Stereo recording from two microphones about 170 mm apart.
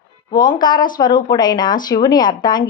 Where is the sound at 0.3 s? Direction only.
25° left (ahead or behind).